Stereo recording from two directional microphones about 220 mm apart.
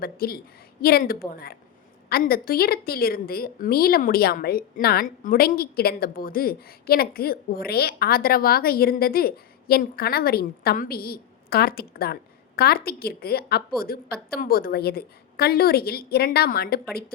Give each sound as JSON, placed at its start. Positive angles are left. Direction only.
{"t": 0.0, "sound": "a woman's voice", "side_deg": 45}